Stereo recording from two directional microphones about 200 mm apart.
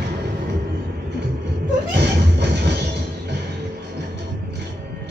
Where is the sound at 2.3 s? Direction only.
55° right (ahead or behind).